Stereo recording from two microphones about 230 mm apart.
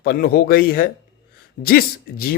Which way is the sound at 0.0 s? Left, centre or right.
Left.